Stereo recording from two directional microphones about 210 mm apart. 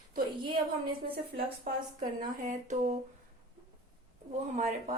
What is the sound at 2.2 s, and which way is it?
Speech, 35° right (ahead or behind).